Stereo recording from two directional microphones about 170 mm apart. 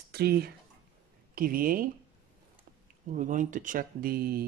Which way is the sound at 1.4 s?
55° right (ahead or behind).